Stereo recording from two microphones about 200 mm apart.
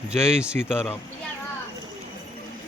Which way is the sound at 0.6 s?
5° right (ahead or behind).